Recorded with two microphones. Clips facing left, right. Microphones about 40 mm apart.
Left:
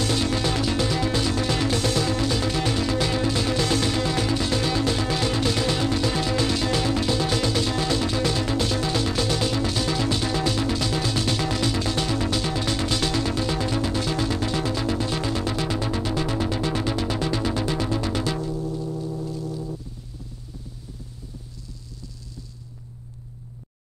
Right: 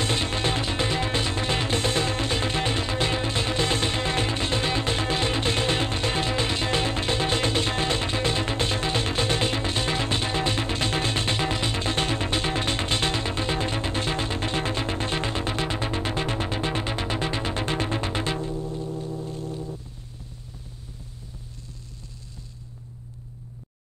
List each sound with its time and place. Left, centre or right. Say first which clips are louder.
0.0 s music: left 2 dB; right
19.2 s brass instrument: left 2 dB; right